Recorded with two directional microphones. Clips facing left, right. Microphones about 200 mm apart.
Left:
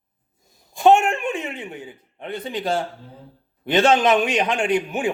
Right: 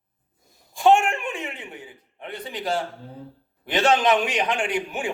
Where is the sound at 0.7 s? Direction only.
20° left (ahead or behind).